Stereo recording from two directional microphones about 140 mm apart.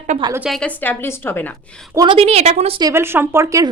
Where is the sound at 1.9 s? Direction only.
30° right (ahead or behind).